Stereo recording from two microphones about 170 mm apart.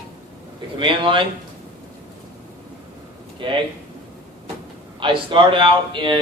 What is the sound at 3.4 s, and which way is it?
Speech, 30° right (ahead or behind).